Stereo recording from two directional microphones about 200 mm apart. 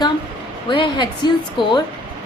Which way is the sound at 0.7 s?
25° left (ahead or behind).